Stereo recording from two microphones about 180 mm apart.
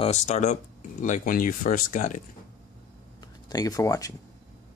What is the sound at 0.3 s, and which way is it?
Speech, 40° left (ahead or behind).